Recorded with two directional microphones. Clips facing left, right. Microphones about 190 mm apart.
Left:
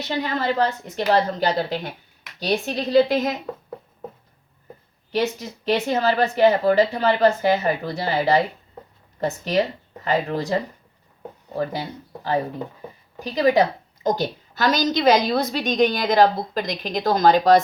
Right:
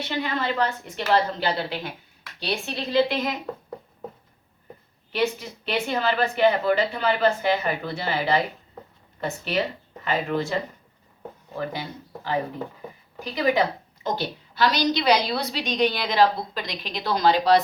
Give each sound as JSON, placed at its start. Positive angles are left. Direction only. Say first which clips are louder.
{"t": 0.1, "sound": "speech", "louder": "left 4 dB", "side_deg": 40}
{"t": 5.1, "sound": "a woman's voice", "louder": "left 2 dB", "side_deg": 40}